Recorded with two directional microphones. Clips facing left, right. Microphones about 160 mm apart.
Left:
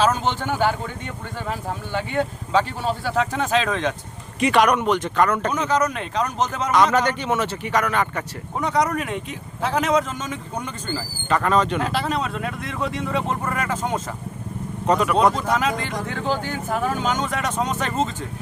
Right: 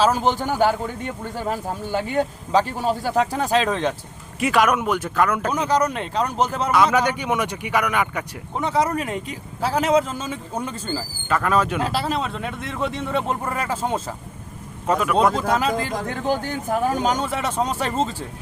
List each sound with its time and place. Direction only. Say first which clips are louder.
0.0 s speech: right 2 dB; 35° right (ahead or behind)
4.4 s speech: left 1 dB; 5° right (ahead or behind)
5.6 s speech: right 1 dB; 35° right (ahead or behind)
6.7 s speech: left 1 dB; 10° right (ahead or behind)
8.8 s speech: right 1 dB; 30° right (ahead or behind)
10.9 s speech: left 2 dB; 5° right (ahead or behind)
11.8 s speech: even; 35° right (ahead or behind)
12.8 s speech: right 1 dB; centre (ahead or behind)
13.5 s speech: even; 30° right (ahead or behind)
14.8 s speech: left 1 dB; 5° right (ahead or behind)
15.4 s speech: right 1 dB; 35° right (ahead or behind)